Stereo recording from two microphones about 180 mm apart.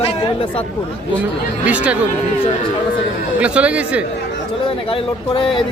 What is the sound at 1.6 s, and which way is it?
Speech, 5° right (ahead or behind).